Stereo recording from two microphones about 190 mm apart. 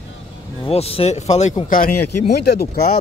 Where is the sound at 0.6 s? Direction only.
30° left (ahead or behind).